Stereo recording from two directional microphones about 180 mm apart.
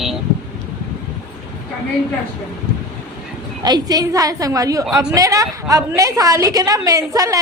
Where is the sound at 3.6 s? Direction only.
20° right (ahead or behind).